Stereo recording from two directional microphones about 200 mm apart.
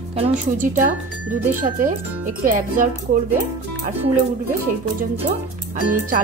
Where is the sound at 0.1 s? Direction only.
35° right (ahead or behind).